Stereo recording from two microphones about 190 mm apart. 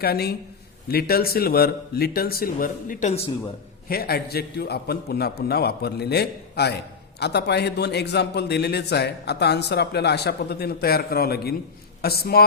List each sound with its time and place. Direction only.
0.0 s a man's voice: 55° left (ahead or behind)
3.8 s a man's voice: 55° left (ahead or behind)